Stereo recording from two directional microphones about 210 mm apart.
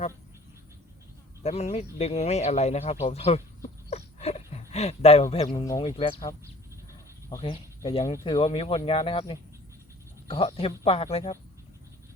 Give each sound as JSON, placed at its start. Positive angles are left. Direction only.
{"t": 1.5, "sound": "speech", "side_deg": 30}